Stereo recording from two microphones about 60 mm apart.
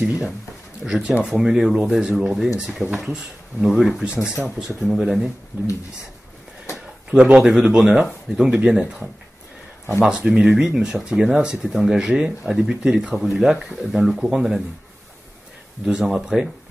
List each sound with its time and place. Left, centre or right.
0.8 s speech: centre
4.6 s speech: centre
7.1 s speech: centre
7.5 s speech: centre
15.8 s speech: centre